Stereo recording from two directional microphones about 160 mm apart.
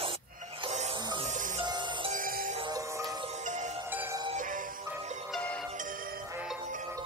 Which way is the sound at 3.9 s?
15° right (ahead or behind).